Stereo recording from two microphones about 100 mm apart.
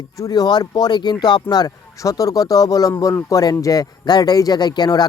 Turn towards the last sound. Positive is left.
turn(degrees=45)  # may be behind; listen again after turning